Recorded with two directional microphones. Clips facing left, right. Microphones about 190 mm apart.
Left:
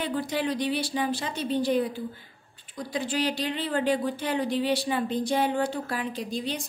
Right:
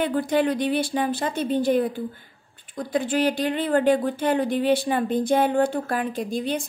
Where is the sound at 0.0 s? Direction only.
55° right (ahead or behind).